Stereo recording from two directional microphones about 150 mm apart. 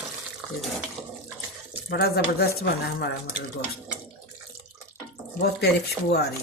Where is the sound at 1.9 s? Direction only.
90° left.